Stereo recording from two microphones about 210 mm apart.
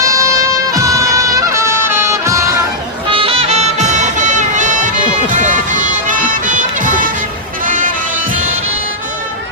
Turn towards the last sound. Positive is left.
turn(degrees=-40)  # may be behind; listen again after turning